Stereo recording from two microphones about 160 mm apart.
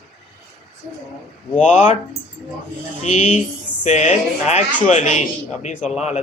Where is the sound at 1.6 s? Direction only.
45° left (ahead or behind).